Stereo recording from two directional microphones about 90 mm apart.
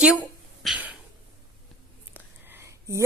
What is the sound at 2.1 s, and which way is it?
Whispering, 25° right (ahead or behind).